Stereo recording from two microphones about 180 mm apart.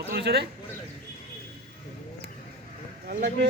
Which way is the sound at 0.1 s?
65° right (ahead or behind).